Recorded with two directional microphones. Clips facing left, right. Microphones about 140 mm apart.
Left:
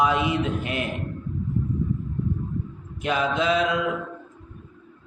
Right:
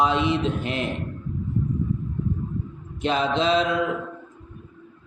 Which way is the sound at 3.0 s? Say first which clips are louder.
Right 1 dB; 25° right (ahead or behind).